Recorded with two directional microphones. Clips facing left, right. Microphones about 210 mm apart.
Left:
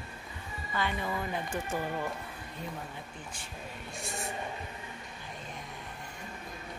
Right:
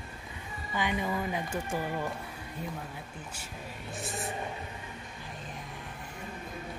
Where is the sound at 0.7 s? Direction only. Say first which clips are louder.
Right 2 dB; 15° right (ahead or behind).